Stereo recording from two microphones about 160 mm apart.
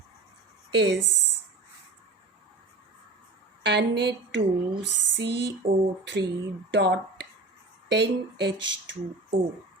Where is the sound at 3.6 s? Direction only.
90° right.